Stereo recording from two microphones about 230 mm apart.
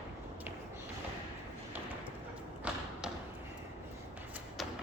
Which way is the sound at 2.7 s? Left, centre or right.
Centre.